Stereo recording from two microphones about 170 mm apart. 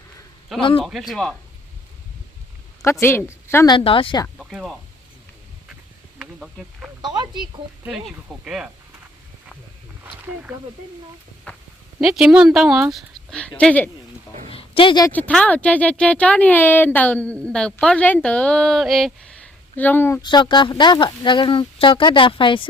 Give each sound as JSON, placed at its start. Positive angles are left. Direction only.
{"t": 0.6, "sound": "speech", "side_deg": 35}
{"t": 0.9, "sound": "speech", "side_deg": 0}
{"t": 2.8, "sound": "speech", "side_deg": 15}
{"t": 3.8, "sound": "speech", "side_deg": 30}
{"t": 4.4, "sound": "speech", "side_deg": -5}
{"t": 6.1, "sound": "speech", "side_deg": -5}
{"t": 7.0, "sound": "speech", "side_deg": -25}
{"t": 7.9, "sound": "speech", "side_deg": -5}
{"t": 11.5, "sound": "a sound", "side_deg": 10}
{"t": 11.9, "sound": "speech", "side_deg": 0}
{"t": 14.5, "sound": "a sound", "side_deg": 30}
{"t": 15.0, "sound": "speech", "side_deg": 10}
{"t": 20.2, "sound": "speech", "side_deg": 25}